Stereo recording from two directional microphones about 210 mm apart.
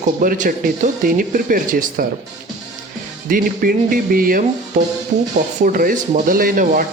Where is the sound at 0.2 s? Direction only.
40° right (ahead or behind).